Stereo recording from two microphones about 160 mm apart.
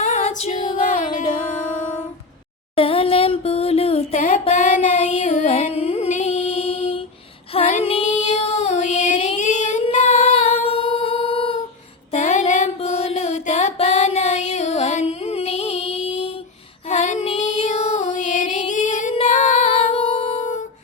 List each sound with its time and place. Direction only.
0.0 s music: 45° left (ahead or behind)
2.7 s a sound: 35° left (ahead or behind)
7.5 s child singing: 40° left (ahead or behind)
12.1 s music: 50° left (ahead or behind)
16.9 s female singing: 45° left (ahead or behind)